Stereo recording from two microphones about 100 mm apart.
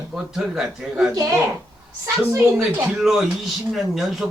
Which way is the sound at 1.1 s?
35° right (ahead or behind).